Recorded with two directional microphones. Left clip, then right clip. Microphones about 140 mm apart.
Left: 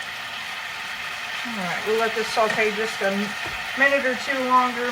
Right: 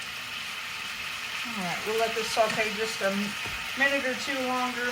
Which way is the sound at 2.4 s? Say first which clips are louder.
Left 4 dB; 15° right (ahead or behind).